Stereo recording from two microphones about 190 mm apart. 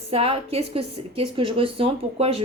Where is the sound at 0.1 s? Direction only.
30° right (ahead or behind).